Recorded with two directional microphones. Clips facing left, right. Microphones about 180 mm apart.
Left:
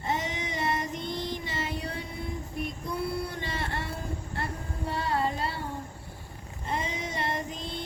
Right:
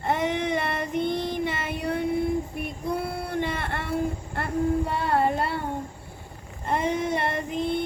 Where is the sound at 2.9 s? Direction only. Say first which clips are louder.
Right 4 dB; 55° right (ahead or behind).